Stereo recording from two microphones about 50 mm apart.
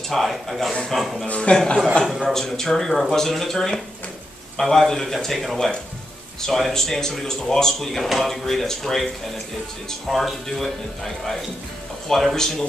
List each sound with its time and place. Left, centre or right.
0.1 s speech: centre
1.2 s a man's voice: left
2.0 s speech: centre
12.1 s speech: centre